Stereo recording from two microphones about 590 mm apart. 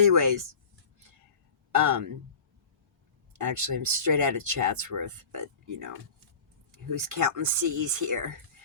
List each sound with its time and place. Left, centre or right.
0.0 s speech: right
1.7 s speech: right
3.3 s speech: right
7.2 s speech: right